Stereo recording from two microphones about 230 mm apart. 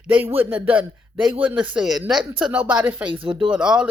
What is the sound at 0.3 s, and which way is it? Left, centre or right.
Speech, centre.